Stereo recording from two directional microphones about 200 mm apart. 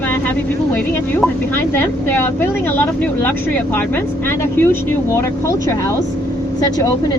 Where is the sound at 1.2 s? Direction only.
10° left (ahead or behind).